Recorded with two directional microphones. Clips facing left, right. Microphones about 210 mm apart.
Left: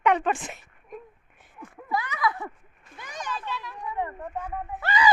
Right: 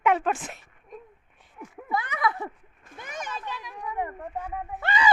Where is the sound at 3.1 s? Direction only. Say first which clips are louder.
Left 1 dB; 15° right (ahead or behind).